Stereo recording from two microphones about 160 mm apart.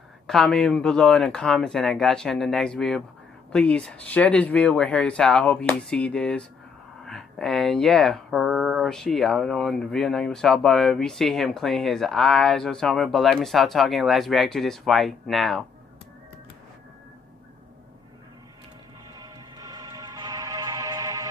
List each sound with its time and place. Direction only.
0.3 s speech: 5° left (ahead or behind)
19.1 s music: 25° right (ahead or behind)